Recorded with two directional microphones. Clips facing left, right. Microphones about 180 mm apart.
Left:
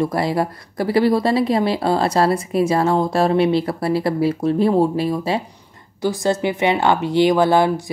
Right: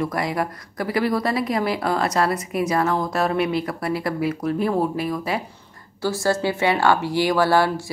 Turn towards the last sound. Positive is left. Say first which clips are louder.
# left 3 dB
turn(degrees=20)  # may be behind; listen again after turning